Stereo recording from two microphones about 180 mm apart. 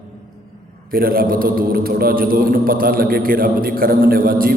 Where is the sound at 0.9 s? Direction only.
55° right (ahead or behind).